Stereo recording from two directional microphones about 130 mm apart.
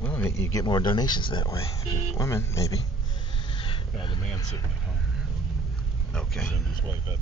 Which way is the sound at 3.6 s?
40° left (ahead or behind).